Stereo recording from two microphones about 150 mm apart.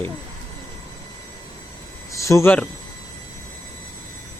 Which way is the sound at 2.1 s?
20° left (ahead or behind).